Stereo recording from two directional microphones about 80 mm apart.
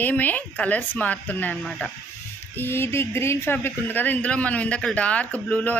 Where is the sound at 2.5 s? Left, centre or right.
Left.